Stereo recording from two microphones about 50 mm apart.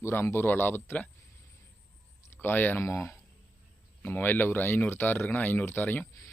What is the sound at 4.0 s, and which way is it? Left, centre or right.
Speech, left.